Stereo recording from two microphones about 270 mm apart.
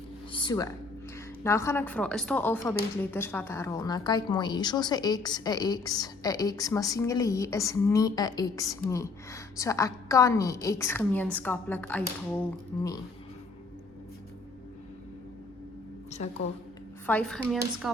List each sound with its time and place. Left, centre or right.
0.3 s a sound: centre
1.5 s a woman's voice: centre
16.2 s a woman's voice: left
17.1 s speech: centre